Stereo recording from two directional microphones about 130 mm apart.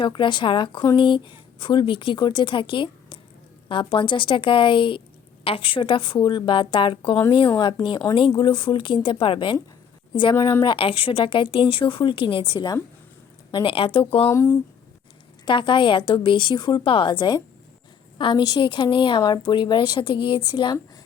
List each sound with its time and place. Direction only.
0.0 s speech: 40° left (ahead or behind)
10.3 s speech: 25° left (ahead or behind)
10.6 s speech: 40° left (ahead or behind)
14.3 s speech: 20° left (ahead or behind)
15.4 s speech: 40° left (ahead or behind)